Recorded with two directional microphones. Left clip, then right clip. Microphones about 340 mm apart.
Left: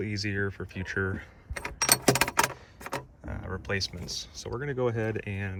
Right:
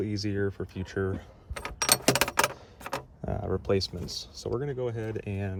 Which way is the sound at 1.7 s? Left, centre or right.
Centre.